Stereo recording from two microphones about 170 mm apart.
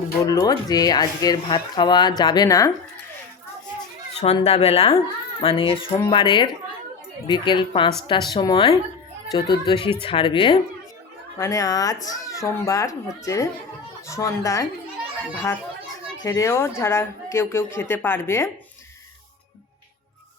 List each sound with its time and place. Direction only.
0.3 s speech: 20° left (ahead or behind)
4.2 s speech: 40° left (ahead or behind)
11.3 s speech: 20° left (ahead or behind)
16.2 s speech: 20° left (ahead or behind)